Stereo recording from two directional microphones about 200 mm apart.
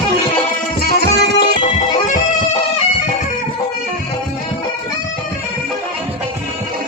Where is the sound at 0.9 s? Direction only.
55° left (ahead or behind).